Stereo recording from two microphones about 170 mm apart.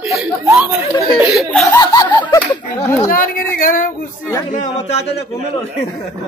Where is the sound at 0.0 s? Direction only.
Centre (ahead or behind).